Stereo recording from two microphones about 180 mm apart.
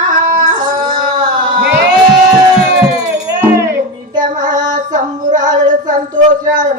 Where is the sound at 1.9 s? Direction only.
5° right (ahead or behind).